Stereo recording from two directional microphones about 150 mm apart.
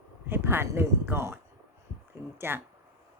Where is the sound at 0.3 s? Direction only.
15° right (ahead or behind).